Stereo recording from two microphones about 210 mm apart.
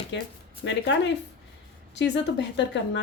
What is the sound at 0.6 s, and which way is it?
Speech, 60° left (ahead or behind).